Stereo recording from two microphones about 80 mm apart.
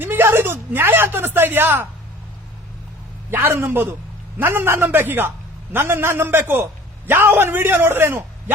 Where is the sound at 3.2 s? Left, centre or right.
Right.